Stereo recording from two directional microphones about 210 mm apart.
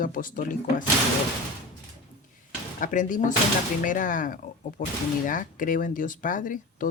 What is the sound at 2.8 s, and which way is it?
Speech, 40° left (ahead or behind).